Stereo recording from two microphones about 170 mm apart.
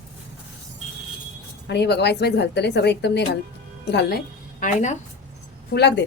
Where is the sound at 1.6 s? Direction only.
80° left.